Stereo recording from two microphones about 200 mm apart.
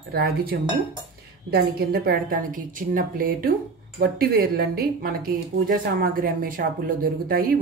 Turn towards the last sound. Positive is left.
turn(degrees=-45)  # may be behind; listen again after turning